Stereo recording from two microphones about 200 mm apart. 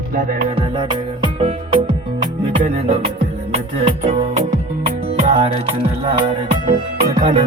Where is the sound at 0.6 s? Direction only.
25° right (ahead or behind).